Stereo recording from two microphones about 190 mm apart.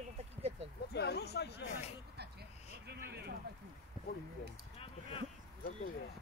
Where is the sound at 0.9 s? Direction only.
60° left (ahead or behind).